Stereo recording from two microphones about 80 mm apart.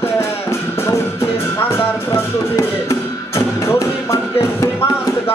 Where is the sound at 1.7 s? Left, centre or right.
Left.